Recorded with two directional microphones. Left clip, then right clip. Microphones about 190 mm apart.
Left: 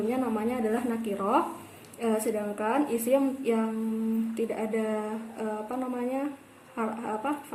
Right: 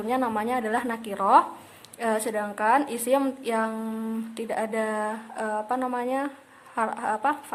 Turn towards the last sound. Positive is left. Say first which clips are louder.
# right 6 dB
turn(degrees=-40)  # may be behind; listen again after turning